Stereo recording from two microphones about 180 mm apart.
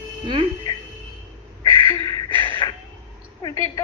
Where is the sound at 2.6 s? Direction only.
25° left (ahead or behind).